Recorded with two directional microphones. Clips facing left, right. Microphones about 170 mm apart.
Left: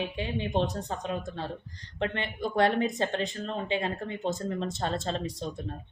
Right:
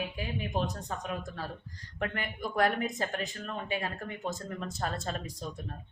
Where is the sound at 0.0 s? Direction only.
30° left (ahead or behind).